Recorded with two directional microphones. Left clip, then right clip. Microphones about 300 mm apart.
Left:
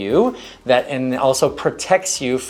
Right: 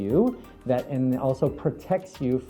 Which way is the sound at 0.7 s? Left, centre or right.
Centre.